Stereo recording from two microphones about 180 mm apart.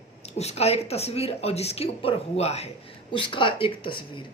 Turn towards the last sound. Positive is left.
turn(degrees=30)  # may be behind; listen again after turning